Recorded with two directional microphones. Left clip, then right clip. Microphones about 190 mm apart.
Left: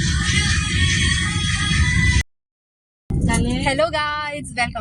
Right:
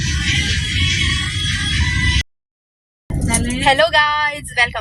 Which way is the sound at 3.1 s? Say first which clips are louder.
Right 1 dB; centre (ahead or behind).